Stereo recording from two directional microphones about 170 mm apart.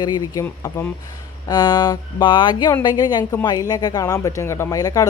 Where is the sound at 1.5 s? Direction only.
25° left (ahead or behind).